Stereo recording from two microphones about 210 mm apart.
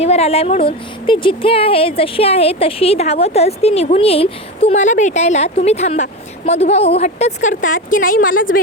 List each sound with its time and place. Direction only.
0.0 s speech: 30° left (ahead or behind)